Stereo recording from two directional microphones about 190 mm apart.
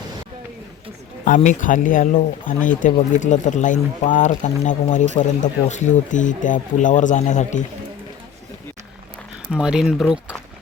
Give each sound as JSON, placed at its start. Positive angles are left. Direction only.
{"t": 1.2, "sound": "speech", "side_deg": 40}
{"t": 9.5, "sound": "speech", "side_deg": -5}